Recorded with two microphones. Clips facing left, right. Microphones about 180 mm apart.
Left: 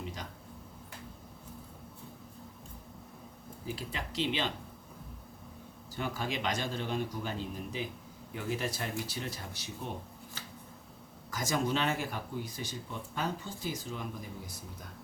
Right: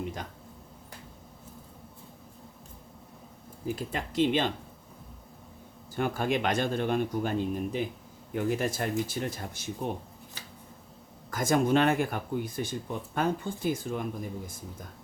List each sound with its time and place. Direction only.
3.7 s speech: 50° right (ahead or behind)
6.0 s speech: 55° right (ahead or behind)
11.3 s speech: 55° right (ahead or behind)